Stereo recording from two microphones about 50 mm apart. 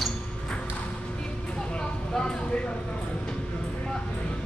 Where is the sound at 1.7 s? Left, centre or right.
Centre.